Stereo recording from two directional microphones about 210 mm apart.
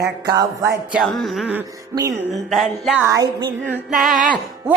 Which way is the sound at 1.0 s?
Centre (ahead or behind).